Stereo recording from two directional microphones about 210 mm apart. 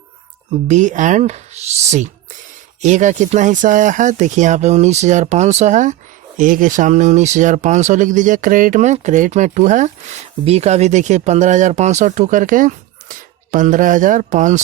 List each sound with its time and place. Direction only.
0.7 s speech: 35° right (ahead or behind)